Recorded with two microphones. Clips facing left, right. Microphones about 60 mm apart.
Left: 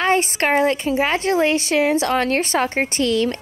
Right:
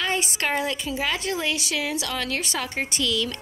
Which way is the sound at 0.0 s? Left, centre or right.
Left.